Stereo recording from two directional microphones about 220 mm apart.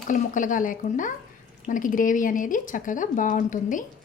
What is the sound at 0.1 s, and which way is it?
Speech, 35° left (ahead or behind).